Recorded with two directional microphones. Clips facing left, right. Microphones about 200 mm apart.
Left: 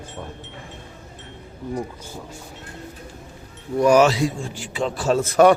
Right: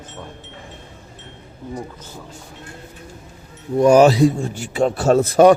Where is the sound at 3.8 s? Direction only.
30° right (ahead or behind).